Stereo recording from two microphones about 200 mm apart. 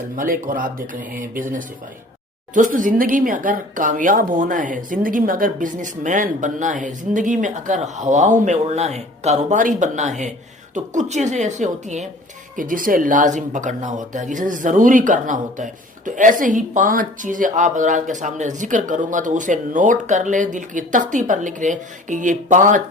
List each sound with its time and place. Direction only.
0.2 s speech: 45° right (ahead or behind)